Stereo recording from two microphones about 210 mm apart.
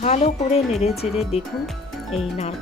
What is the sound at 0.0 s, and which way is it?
Speech, 30° left (ahead or behind).